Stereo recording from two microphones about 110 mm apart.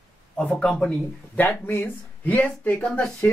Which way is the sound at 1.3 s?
15° left (ahead or behind).